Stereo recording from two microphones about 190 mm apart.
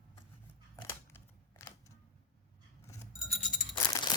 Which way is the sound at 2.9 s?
20° left (ahead or behind).